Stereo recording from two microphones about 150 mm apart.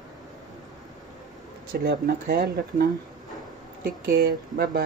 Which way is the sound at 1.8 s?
90° right.